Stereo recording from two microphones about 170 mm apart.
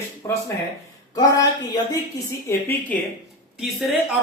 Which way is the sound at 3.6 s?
Centre (ahead or behind).